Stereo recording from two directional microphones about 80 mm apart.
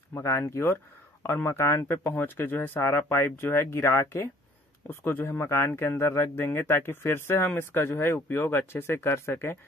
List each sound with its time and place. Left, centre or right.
0.1 s speech: left